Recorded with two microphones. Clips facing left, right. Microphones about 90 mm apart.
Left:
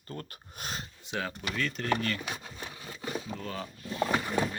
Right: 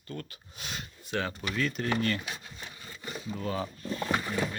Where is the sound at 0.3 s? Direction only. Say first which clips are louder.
Left 2 dB; 45° left (ahead or behind).